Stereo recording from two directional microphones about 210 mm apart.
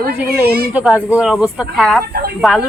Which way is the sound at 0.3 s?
50° right (ahead or behind).